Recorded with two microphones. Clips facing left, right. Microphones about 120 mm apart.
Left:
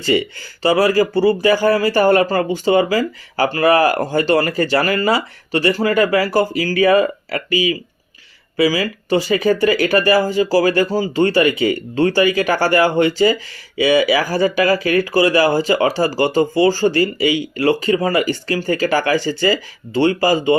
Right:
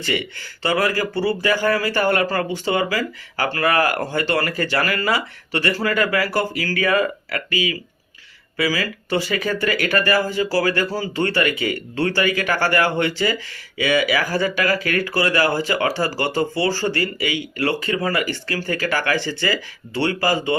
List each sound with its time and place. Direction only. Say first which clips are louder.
0.9 s speech: left 7 dB; 20° left (ahead or behind)
1.9 s speech: left 6 dB; 40° left (ahead or behind)
2.1 s speech: left 5 dB; 25° left (ahead or behind)
4.2 s speech: left 7 dB; 20° left (ahead or behind)
14.2 s speech: left 5 dB; 15° left (ahead or behind)
19.1 s speech: left 6 dB; 45° left (ahead or behind)
20.0 s speech: left 6 dB; 15° left (ahead or behind)